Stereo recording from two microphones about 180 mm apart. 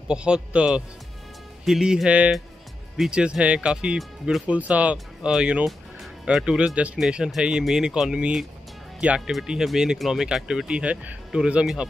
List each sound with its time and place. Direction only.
0.1 s speech: 5° right (ahead or behind)